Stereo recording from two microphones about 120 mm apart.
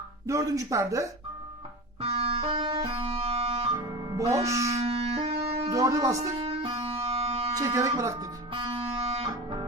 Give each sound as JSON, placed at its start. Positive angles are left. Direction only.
{"t": 0.3, "sound": "speech", "side_deg": -25}
{"t": 2.0, "sound": "music", "side_deg": -55}
{"t": 4.4, "sound": "speech", "side_deg": -25}
{"t": 4.7, "sound": "wind instrument", "side_deg": -60}
{"t": 5.7, "sound": "speech", "side_deg": -25}
{"t": 6.4, "sound": "music", "side_deg": -45}
{"t": 7.5, "sound": "speech", "side_deg": -30}
{"t": 8.5, "sound": "music", "side_deg": -45}